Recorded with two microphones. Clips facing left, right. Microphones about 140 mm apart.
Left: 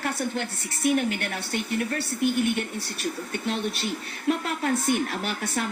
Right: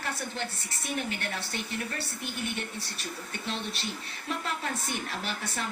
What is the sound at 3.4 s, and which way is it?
Speech, 55° left (ahead or behind).